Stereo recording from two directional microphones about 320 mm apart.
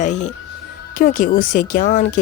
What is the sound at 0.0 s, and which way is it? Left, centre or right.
A woman's voice, left.